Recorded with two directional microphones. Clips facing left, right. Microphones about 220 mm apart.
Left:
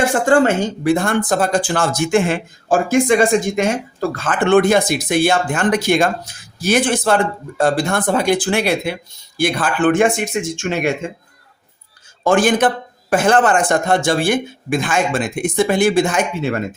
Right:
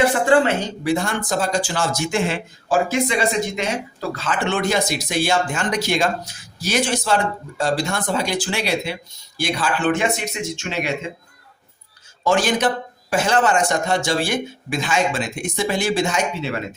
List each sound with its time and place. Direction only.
0.0 s speech: 45° left (ahead or behind)
12.2 s speech: 55° left (ahead or behind)